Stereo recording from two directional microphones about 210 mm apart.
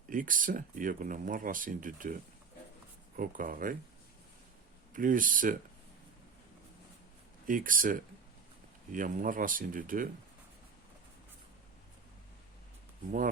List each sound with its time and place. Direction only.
0.1 s speech: 40° right (ahead or behind)
4.9 s speech: 40° right (ahead or behind)
7.4 s speech: 40° right (ahead or behind)
13.1 s speech: 40° right (ahead or behind)